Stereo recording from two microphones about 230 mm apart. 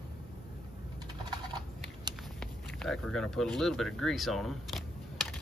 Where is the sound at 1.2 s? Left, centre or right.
Centre.